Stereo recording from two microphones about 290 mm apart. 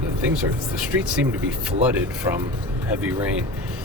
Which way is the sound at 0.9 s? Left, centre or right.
Centre.